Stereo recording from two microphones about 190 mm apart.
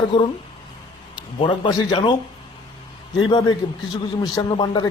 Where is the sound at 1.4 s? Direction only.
25° left (ahead or behind).